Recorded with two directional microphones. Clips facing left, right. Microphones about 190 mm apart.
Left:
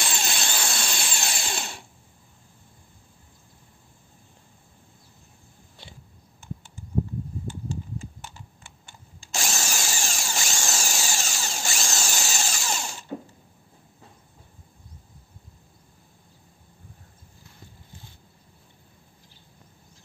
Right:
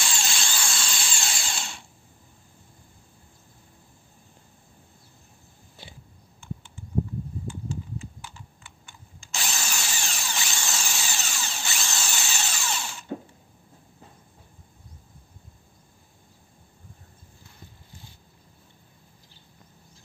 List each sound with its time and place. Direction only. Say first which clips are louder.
0.0 s dental drill: left 2 dB; 55° left (ahead or behind)
9.2 s drill: left 3 dB; 45° left (ahead or behind)